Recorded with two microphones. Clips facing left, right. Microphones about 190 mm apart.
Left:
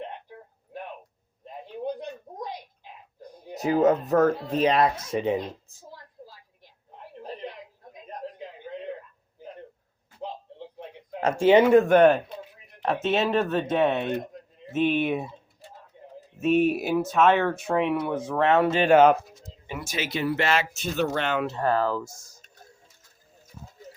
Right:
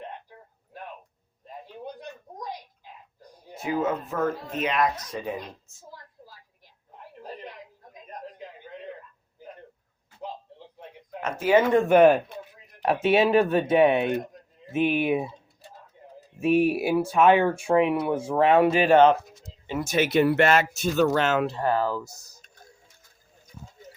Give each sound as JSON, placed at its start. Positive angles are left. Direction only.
{"t": 1.6, "sound": "a sound", "side_deg": 25}
{"t": 3.5, "sound": "speech", "side_deg": 40}
{"t": 11.2, "sound": "speech", "side_deg": 30}
{"t": 11.6, "sound": "speech", "side_deg": 5}
{"t": 11.9, "sound": "speech", "side_deg": -10}
{"t": 16.4, "sound": "speech", "side_deg": -10}
{"t": 18.9, "sound": "speech", "side_deg": 5}
{"t": 19.9, "sound": "speech", "side_deg": -60}